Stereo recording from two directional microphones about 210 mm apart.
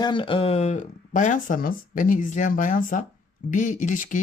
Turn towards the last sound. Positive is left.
turn(degrees=40)  # may be behind; listen again after turning